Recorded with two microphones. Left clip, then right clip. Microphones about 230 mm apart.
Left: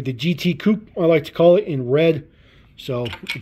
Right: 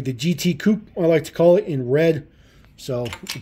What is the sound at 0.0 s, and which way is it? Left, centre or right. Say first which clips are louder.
Speech: left 1 dB; centre.